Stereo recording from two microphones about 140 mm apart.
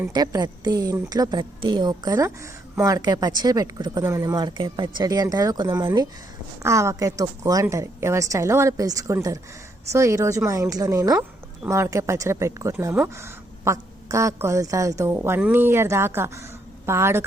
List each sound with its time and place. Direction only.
0.0 s speech: 30° right (ahead or behind)